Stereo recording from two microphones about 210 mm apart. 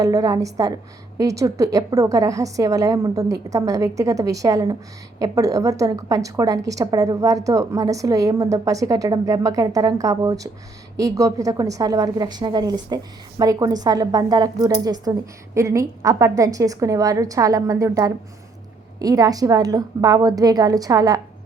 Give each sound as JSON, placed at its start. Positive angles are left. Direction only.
{"t": 0.0, "sound": "a woman's voice", "side_deg": -15}